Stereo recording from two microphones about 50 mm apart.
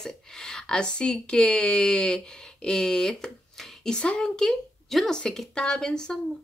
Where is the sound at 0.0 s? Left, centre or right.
Centre.